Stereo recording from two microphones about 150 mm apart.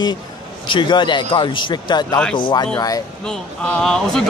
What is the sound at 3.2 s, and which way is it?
Speech, 5° left (ahead or behind).